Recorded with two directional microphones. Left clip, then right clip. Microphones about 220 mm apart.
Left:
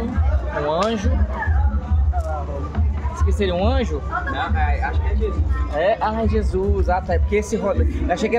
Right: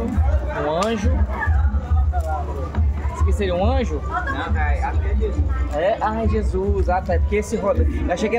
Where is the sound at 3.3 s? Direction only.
15° left (ahead or behind).